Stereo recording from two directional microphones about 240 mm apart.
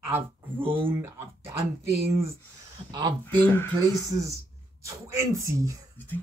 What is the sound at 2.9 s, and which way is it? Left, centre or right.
Speech, centre.